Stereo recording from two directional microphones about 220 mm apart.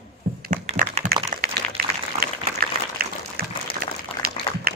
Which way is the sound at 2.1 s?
30° right (ahead or behind).